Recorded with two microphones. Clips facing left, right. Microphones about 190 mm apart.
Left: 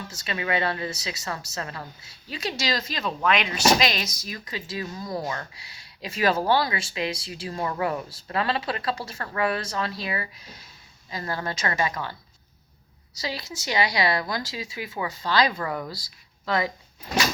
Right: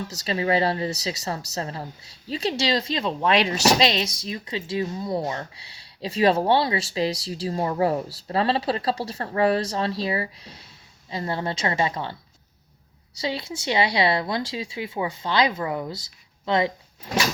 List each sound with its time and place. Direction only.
0.1 s speech: 30° right (ahead or behind)
13.2 s speech: 30° right (ahead or behind)